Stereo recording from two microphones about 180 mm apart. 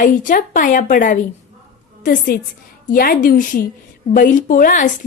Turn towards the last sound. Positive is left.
turn(degrees=50)  # may be behind; listen again after turning